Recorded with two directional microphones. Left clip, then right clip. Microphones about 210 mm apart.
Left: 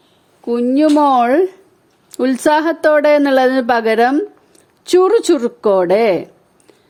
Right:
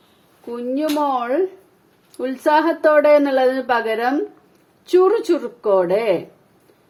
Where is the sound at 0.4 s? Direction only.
55° left (ahead or behind).